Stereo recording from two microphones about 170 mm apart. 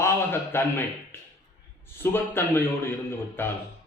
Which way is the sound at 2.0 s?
15° left (ahead or behind).